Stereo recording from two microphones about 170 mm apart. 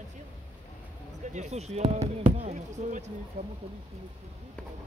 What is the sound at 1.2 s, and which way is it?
Speech, 45° right (ahead or behind).